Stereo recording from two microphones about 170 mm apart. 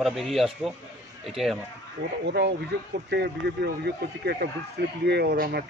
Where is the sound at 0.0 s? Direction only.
Centre (ahead or behind).